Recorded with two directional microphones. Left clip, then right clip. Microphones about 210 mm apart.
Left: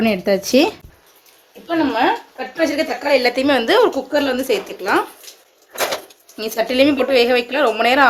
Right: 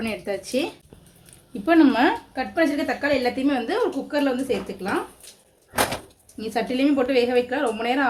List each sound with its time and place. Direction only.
0.0 s speech: 35° left (ahead or behind)
1.6 s speech: 20° right (ahead or behind)
2.6 s a woman's voice: 30° left (ahead or behind); by 4.9 s 50° left (ahead or behind)
6.3 s a woman's voice: 50° left (ahead or behind)